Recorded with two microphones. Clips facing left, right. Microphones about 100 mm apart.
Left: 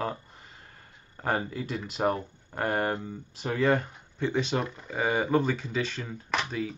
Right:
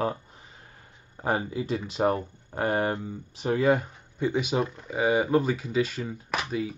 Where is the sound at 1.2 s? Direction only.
15° right (ahead or behind).